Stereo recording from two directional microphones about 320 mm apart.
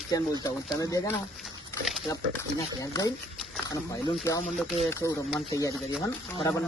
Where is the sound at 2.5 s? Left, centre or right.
Centre.